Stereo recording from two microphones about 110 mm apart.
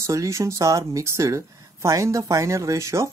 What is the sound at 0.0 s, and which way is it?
Speech, 25° right (ahead or behind).